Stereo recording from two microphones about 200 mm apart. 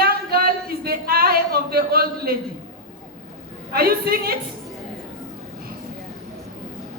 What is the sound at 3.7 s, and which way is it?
Speech, 50° right (ahead or behind).